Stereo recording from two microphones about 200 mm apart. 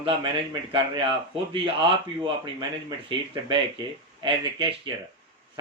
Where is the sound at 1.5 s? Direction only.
25° right (ahead or behind).